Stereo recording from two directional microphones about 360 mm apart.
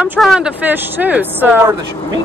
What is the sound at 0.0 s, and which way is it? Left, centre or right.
Speech, centre.